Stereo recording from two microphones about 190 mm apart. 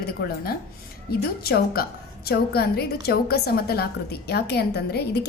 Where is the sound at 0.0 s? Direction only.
55° left (ahead or behind).